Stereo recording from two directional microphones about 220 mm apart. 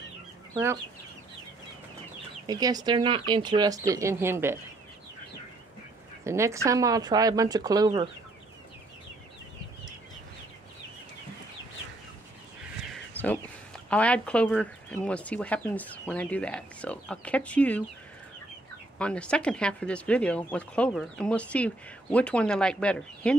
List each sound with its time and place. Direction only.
2.4 s speech: 15° right (ahead or behind)
6.2 s speech: 15° right (ahead or behind)
13.2 s a sound: 5° left (ahead or behind)
13.8 s speech: 5° left (ahead or behind)
18.9 s speech: 5° left (ahead or behind)